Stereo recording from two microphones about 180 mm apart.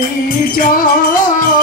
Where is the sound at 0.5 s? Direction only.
50° left (ahead or behind).